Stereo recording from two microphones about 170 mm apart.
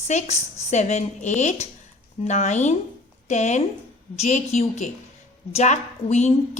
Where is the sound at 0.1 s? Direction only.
45° left (ahead or behind).